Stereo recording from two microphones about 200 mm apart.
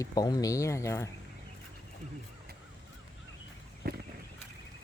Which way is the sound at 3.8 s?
50° right (ahead or behind).